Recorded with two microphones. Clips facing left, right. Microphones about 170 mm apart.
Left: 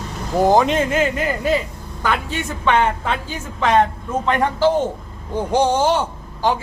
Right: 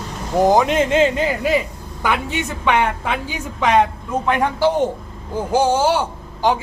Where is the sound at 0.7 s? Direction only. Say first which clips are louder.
Right 3 dB; 25° right (ahead or behind).